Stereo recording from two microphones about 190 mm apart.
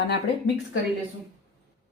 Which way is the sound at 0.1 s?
65° left (ahead or behind).